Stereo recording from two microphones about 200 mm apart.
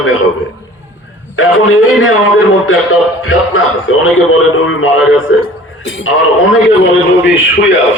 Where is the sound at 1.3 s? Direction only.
90° left.